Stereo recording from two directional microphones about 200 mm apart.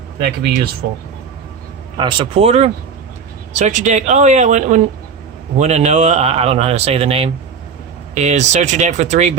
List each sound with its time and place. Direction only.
0.2 s speech: 50° right (ahead or behind)
2.0 s speech: 25° right (ahead or behind)